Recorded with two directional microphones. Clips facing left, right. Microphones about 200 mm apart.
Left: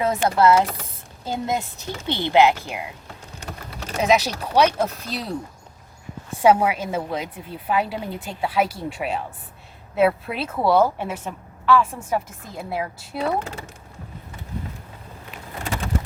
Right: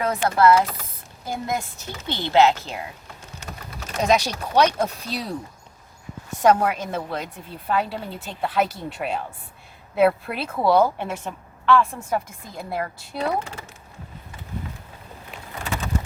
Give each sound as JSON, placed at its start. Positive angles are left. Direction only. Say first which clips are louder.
{"t": 0.0, "sound": "a woman's voice", "louder": "left 1 dB", "side_deg": 25}
{"t": 3.9, "sound": "a woman's voice", "louder": "left 1 dB", "side_deg": 5}
{"t": 6.4, "sound": "a woman's voice", "louder": "left 1 dB", "side_deg": 10}